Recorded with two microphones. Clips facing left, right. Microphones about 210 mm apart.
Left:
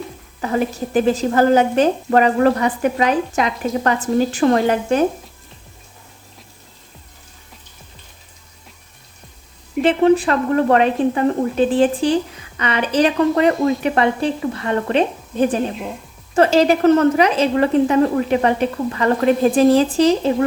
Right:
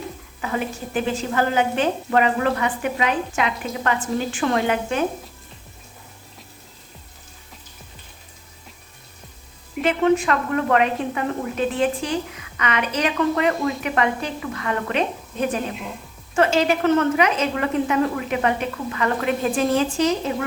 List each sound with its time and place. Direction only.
0.4 s speech: 40° left (ahead or behind)
9.8 s speech: 35° left (ahead or behind)